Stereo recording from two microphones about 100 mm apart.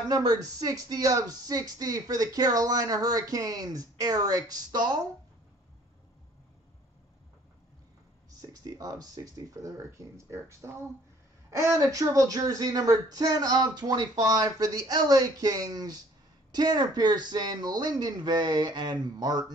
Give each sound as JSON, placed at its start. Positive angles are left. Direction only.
{"t": 0.1, "sound": "speech", "side_deg": -40}
{"t": 8.4, "sound": "speech", "side_deg": -35}